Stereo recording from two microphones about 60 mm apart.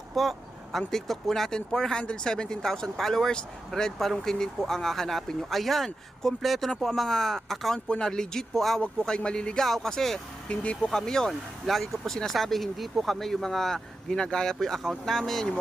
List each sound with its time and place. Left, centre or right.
0.1 s speech: centre
8.8 s speech: centre
10.5 s speech: centre